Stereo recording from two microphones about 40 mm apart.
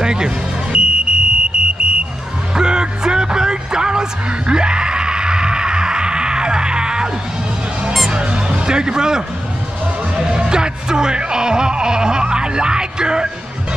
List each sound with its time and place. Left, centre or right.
0.0 s speech: centre
0.7 s fire alarm: right
2.5 s music: centre
8.1 s speech: right
10.1 s music: centre